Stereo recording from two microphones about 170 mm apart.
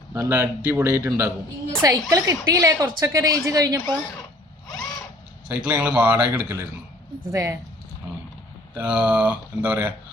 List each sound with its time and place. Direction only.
0.1 s a woman's voice: 15° right (ahead or behind)
5.5 s speech: 10° right (ahead or behind)
8.7 s speech: 10° right (ahead or behind)